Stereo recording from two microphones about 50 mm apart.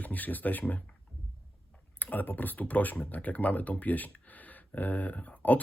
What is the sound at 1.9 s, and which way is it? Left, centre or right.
Speech, left.